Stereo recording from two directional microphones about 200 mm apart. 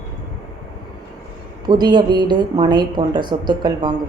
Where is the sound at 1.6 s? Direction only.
20° right (ahead or behind).